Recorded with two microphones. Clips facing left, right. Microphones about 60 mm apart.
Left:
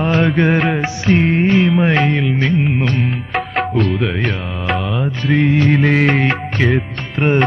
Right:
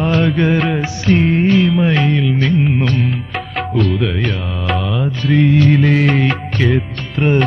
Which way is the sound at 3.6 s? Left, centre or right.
Centre.